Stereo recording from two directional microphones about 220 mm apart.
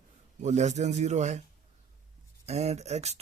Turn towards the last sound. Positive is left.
turn(degrees=-30)  # may be behind; listen again after turning